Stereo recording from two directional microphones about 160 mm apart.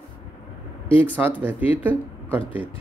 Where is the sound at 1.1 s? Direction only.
10° right (ahead or behind).